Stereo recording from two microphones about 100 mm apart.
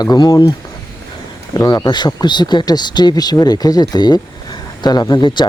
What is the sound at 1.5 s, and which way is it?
Speech, 35° left (ahead or behind).